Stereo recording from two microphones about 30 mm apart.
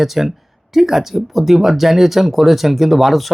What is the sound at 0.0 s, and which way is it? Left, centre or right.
Speech, centre.